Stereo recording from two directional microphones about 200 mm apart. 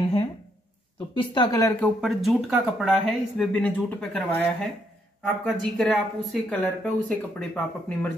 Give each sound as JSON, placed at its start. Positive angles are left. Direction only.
{"t": 1.1, "sound": "speech", "side_deg": 25}
{"t": 1.8, "sound": "speech", "side_deg": 0}